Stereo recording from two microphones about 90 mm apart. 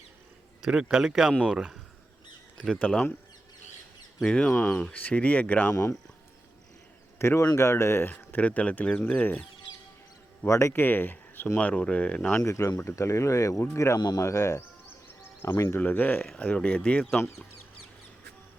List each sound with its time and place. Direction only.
0.6 s a man's voice: 5° right (ahead or behind)
2.7 s speech: 15° left (ahead or behind)
4.2 s speech: 10° left (ahead or behind)
7.2 s a man's voice: 30° left (ahead or behind)
10.4 s speech: 30° left (ahead or behind)
12.4 s speech: 35° left (ahead or behind)
15.8 s speech: 20° left (ahead or behind)